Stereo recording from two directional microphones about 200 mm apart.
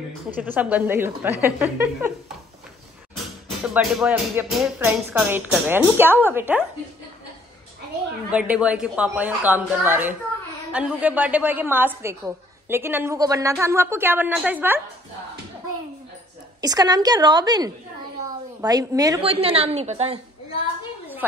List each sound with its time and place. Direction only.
0.3 s a woman's voice: 10° right (ahead or behind)
3.6 s a woman's voice: 5° right (ahead or behind)
8.3 s a woman's voice: 5° right (ahead or behind)
16.6 s a woman's voice: 20° right (ahead or behind)
19.2 s a woman's voice: 30° right (ahead or behind)